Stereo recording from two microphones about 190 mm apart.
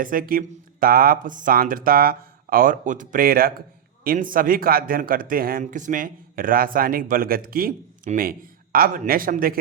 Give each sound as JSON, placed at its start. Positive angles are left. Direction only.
{"t": 0.0, "sound": "speech", "side_deg": -50}